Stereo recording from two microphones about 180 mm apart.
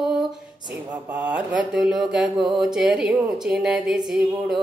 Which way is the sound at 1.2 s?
5° right (ahead or behind).